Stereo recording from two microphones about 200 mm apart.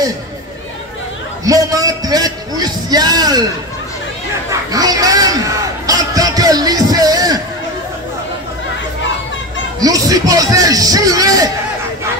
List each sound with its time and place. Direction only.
1.4 s a man's voice: 15° right (ahead or behind)
4.5 s a sound: 20° right (ahead or behind)
9.8 s a man's voice: 20° right (ahead or behind)